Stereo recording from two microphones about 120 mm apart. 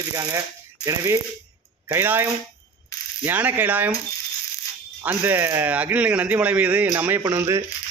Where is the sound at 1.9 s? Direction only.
20° right (ahead or behind).